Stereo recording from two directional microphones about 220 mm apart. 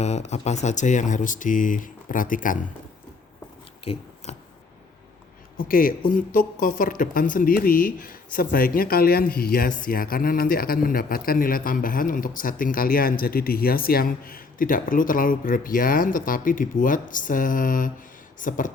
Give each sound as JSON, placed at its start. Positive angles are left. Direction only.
{"t": 0.0, "sound": "speech", "side_deg": 30}
{"t": 3.9, "sound": "speech", "side_deg": 25}
{"t": 4.3, "sound": "a sound", "side_deg": 30}
{"t": 5.5, "sound": "speech", "side_deg": 40}